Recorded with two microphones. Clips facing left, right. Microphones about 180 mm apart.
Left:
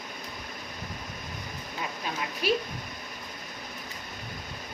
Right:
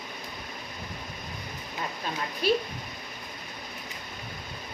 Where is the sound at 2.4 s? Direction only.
10° left (ahead or behind).